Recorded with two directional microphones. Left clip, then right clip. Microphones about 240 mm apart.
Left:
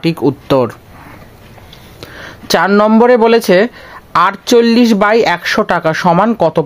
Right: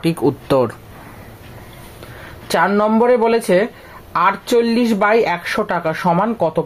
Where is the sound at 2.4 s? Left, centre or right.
Left.